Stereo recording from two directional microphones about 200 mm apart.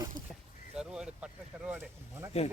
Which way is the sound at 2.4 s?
30° left (ahead or behind).